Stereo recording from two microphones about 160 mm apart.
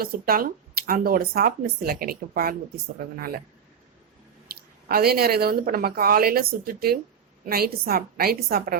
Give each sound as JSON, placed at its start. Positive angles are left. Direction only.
{"t": 0.0, "sound": "speech", "side_deg": -65}
{"t": 4.5, "sound": "speech", "side_deg": -70}